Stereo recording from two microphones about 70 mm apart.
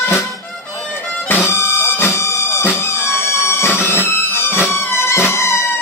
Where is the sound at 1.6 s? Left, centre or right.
Left.